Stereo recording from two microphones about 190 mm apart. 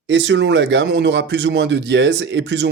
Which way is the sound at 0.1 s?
75° right (ahead or behind).